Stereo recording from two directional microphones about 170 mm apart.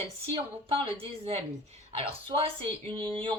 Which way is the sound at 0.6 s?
35° right (ahead or behind).